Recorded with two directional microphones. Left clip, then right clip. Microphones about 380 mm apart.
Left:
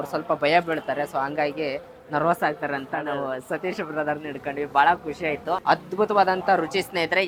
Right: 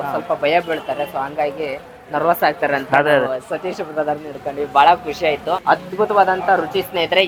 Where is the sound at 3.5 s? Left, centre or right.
Centre.